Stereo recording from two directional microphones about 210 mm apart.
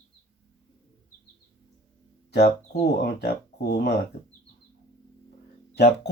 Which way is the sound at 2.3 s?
50° left (ahead or behind).